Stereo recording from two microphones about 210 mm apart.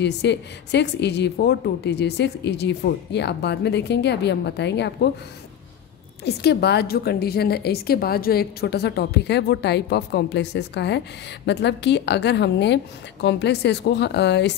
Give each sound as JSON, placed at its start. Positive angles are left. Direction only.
{"t": 0.0, "sound": "a woman's voice", "side_deg": 55}
{"t": 6.2, "sound": "a woman's voice", "side_deg": 50}